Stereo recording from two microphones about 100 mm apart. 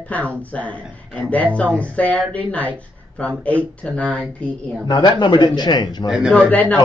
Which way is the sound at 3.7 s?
10° left (ahead or behind).